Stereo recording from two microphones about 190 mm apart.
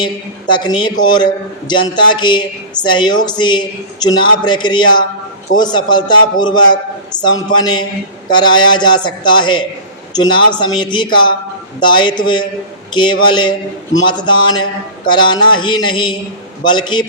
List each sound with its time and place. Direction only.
0.0 s a man's voice: 25° left (ahead or behind)